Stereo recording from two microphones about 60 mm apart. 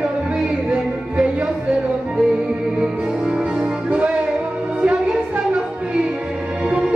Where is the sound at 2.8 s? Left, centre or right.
Centre.